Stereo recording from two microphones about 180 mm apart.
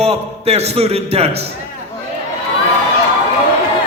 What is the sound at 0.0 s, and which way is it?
Speech, 35° right (ahead or behind).